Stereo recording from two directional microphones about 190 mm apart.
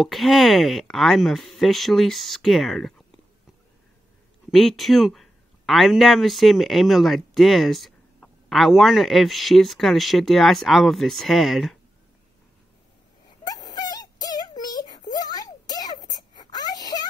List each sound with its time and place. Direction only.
0.0 s speech: centre (ahead or behind)
4.5 s speech: centre (ahead or behind)
13.4 s synthetic singing: 20° left (ahead or behind)